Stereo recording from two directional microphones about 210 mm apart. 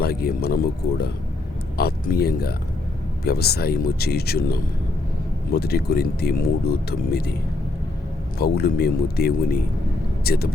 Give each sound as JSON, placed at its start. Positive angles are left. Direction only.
{"t": 0.0, "sound": "speech", "side_deg": 45}
{"t": 8.4, "sound": "speech", "side_deg": 50}